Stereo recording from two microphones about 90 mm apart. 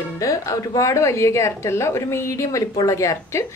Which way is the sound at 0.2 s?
35° left (ahead or behind).